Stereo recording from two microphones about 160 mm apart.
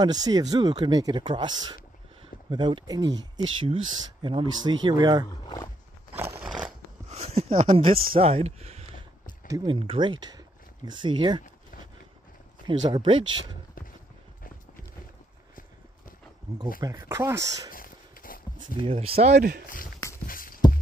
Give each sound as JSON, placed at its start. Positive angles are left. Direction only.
{"t": 0.0, "sound": "speech", "side_deg": -25}
{"t": 6.1, "sound": "scissors", "side_deg": -15}
{"t": 7.1, "sound": "a sound", "side_deg": -40}
{"t": 7.7, "sound": "speech", "side_deg": -35}
{"t": 9.5, "sound": "speech", "side_deg": -25}
{"t": 12.9, "sound": "speech", "side_deg": -30}
{"t": 16.5, "sound": "speech", "side_deg": -20}
{"t": 17.6, "sound": "a sound", "side_deg": 60}
{"t": 18.8, "sound": "speech", "side_deg": -35}
{"t": 19.3, "sound": "speech", "side_deg": -85}
{"t": 20.2, "sound": "music", "side_deg": 60}